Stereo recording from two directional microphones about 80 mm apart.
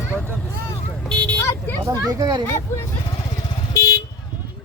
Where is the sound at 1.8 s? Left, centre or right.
Right.